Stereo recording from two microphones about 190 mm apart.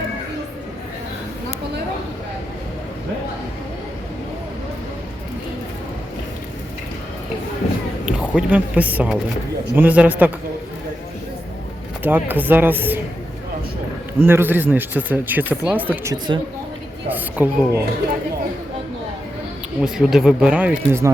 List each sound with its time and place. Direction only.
8.0 s speech: 5° right (ahead or behind)
12.0 s speech: 10° right (ahead or behind)
14.2 s speech: 10° right (ahead or behind)
16.1 s speech: 20° right (ahead or behind)
17.1 s speech: 10° right (ahead or behind)
19.8 s speech: 5° right (ahead or behind)